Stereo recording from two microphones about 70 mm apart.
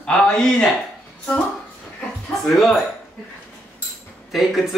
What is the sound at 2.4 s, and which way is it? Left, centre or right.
Speech, centre.